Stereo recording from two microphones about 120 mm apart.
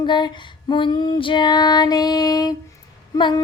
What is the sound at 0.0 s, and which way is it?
Child singing, 40° left (ahead or behind).